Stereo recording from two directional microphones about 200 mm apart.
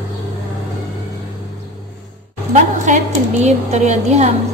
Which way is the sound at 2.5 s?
35° right (ahead or behind).